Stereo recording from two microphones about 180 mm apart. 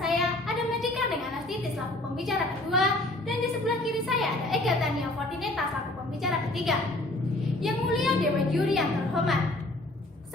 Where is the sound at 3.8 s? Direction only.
Centre (ahead or behind).